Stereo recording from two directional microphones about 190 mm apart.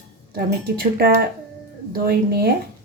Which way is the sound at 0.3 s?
50° right (ahead or behind).